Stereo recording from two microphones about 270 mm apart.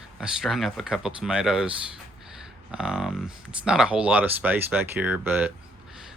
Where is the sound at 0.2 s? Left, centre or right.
Centre.